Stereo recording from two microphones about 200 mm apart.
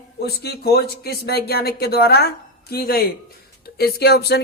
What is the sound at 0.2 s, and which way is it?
Speech, 50° left (ahead or behind).